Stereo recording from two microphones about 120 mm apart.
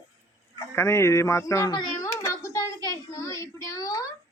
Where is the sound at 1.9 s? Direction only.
25° left (ahead or behind).